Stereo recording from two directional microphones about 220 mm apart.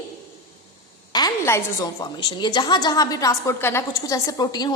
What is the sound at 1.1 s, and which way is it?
A woman's voice, 15° left (ahead or behind).